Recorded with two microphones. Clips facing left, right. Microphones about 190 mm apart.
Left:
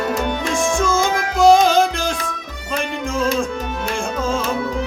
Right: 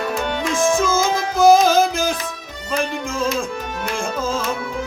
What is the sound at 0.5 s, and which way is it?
Music, centre (ahead or behind).